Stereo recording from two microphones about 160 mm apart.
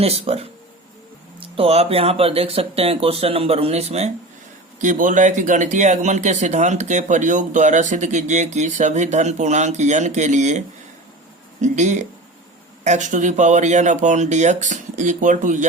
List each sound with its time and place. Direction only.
0.0 s speech: 40° right (ahead or behind)
4.8 s speech: 55° right (ahead or behind)
11.6 s speech: 50° right (ahead or behind)